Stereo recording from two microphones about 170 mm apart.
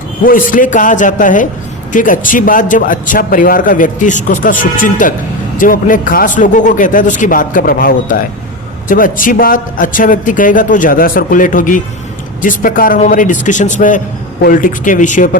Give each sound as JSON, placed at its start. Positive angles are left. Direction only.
{"t": 0.3, "sound": "a man's voice", "side_deg": 55}